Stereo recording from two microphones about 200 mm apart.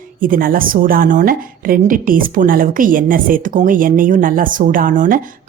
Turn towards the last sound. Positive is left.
turn(degrees=-40)  # may be behind; listen again after turning